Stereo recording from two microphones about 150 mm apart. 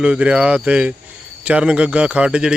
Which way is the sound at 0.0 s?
10° right (ahead or behind).